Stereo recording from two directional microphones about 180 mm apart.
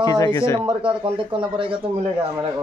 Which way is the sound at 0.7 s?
30° right (ahead or behind).